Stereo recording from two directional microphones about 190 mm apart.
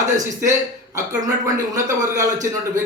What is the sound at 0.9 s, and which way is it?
A man's voice, 15° right (ahead or behind).